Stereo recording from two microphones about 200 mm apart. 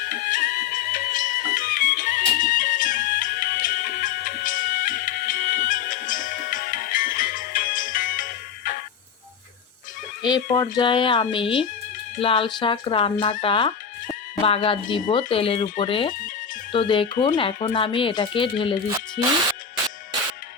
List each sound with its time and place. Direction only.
0.1 s music: 45° left (ahead or behind)
10.2 s speech: 20° left (ahead or behind)